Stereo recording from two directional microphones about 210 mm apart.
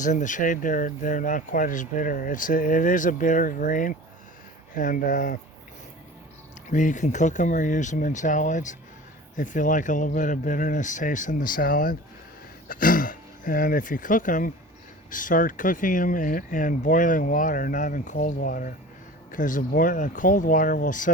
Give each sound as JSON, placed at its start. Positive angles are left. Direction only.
{"t": 0.0, "sound": "speech", "side_deg": 35}
{"t": 6.7, "sound": "speech", "side_deg": 35}